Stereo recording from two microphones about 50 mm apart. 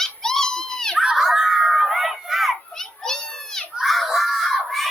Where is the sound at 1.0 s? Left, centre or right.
Centre.